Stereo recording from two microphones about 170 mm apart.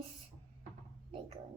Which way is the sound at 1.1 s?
35° right (ahead or behind).